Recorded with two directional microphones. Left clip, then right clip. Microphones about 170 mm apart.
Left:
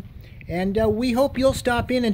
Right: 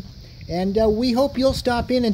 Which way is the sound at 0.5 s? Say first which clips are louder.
Right 2 dB; 10° right (ahead or behind).